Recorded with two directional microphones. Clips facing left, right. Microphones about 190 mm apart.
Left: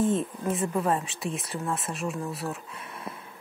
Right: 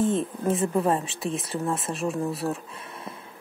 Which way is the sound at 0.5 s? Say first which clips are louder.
Right 3 dB; 25° right (ahead or behind).